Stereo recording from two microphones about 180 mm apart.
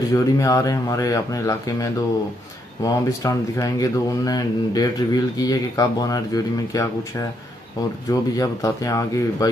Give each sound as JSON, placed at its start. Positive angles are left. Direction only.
{"t": 0.1, "sound": "speech", "side_deg": 15}